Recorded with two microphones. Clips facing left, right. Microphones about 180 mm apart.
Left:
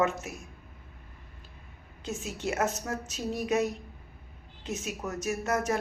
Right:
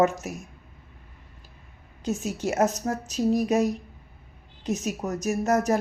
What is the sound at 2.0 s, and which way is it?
Speech, 40° right (ahead or behind).